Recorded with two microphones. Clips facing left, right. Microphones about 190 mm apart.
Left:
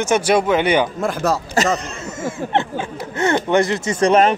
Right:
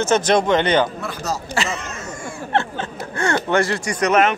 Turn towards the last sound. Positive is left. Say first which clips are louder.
# left 3 dB
turn(degrees=30)  # may be behind; listen again after turning